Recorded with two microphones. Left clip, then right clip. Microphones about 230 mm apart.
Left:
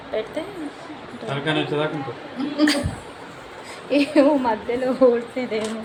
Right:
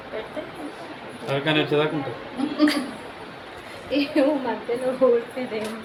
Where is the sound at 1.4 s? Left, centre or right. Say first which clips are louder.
Right 1 dB; right.